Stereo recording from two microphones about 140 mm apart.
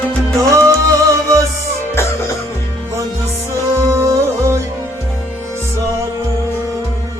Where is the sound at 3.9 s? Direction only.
20° right (ahead or behind).